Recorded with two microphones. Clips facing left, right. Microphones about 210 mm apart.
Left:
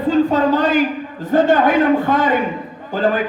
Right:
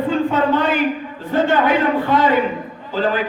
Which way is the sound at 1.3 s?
45° left (ahead or behind).